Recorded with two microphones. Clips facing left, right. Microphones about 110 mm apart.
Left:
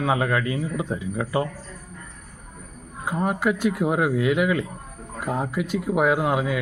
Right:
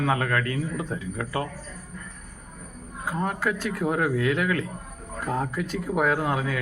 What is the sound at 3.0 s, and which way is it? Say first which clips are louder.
Speech: left 4 dB; 15° left (ahead or behind).